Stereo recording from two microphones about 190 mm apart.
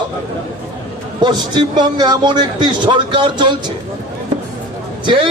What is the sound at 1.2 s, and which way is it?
A man's voice, 25° right (ahead or behind).